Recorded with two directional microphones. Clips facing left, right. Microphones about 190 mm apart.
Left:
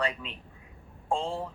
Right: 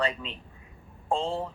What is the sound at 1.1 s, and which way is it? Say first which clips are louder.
Speech: right 2 dB; 30° right (ahead or behind).